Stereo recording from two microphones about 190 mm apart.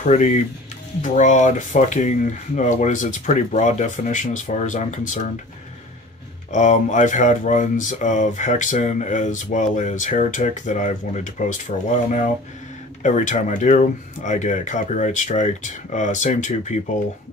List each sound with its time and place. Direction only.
0.0 s speech: 40° left (ahead or behind)
6.5 s speech: 40° left (ahead or behind)